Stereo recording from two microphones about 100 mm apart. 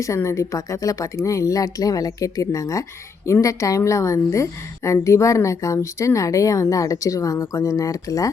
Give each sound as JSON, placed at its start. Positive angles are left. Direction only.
{"t": 0.0, "sound": "a woman's voice", "side_deg": 30}